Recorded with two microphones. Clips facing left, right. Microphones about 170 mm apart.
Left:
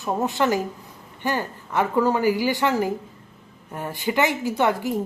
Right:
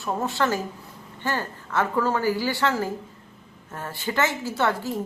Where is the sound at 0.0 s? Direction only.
20° left (ahead or behind).